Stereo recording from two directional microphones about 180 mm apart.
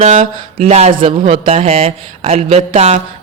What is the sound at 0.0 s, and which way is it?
Speech, 35° right (ahead or behind).